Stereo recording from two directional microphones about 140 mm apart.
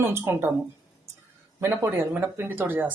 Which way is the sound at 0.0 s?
15° right (ahead or behind).